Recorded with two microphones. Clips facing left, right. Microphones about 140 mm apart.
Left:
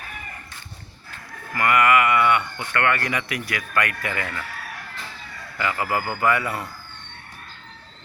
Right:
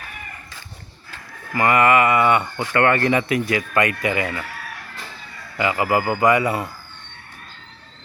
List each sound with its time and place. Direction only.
1.5 s speech: 25° right (ahead or behind)
5.5 s speech: 20° right (ahead or behind)